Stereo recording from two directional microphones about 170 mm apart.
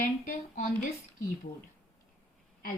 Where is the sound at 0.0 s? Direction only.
50° left (ahead or behind).